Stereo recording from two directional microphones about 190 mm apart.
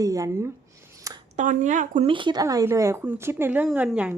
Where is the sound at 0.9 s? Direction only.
15° right (ahead or behind).